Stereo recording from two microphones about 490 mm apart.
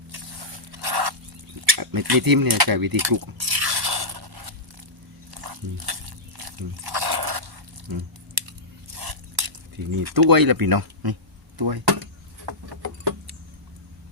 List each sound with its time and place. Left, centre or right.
0.7 s a sound: right
7.9 s chewing: right
9.9 s speech: right